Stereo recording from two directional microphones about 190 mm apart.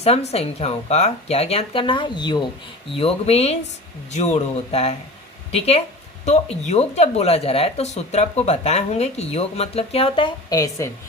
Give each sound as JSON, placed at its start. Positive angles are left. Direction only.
{"t": 0.0, "sound": "a woman's voice", "side_deg": 35}